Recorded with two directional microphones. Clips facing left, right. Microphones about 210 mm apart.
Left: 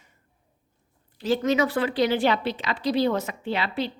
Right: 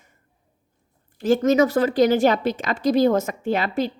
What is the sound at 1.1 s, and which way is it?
Speech, 45° right (ahead or behind).